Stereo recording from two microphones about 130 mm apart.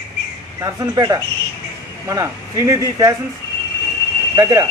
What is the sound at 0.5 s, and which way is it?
Speech, 25° right (ahead or behind).